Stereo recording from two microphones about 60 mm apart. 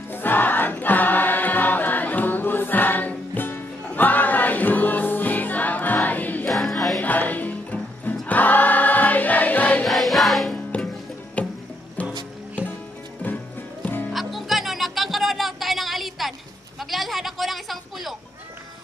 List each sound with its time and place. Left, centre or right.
0.1 s choir: left
6.5 s music: centre
7.0 s music: left
8.3 s choir: left
9.8 s music: centre
11.4 s music: left
14.1 s music: centre
16.9 s a sound: centre